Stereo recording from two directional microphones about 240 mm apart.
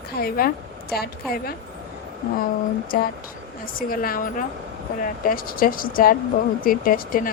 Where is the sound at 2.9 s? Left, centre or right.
Left.